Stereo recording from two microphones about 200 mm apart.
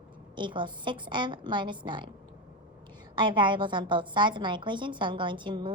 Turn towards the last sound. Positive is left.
turn(degrees=-25)  # may be behind; listen again after turning